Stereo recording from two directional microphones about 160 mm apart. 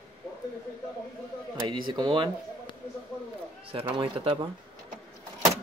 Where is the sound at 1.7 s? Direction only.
30° right (ahead or behind).